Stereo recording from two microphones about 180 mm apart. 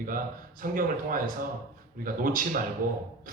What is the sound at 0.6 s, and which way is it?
A man's voice, 50° right (ahead or behind).